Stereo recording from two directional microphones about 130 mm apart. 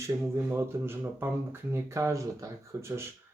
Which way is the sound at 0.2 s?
20° right (ahead or behind).